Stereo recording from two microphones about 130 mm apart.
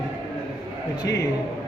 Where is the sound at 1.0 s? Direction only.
25° left (ahead or behind).